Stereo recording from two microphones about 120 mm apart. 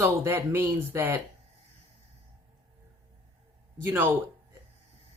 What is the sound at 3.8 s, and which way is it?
Speech, 15° right (ahead or behind).